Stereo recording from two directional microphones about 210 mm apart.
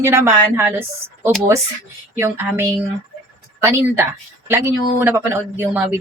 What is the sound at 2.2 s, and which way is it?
A woman's voice, 10° right (ahead or behind).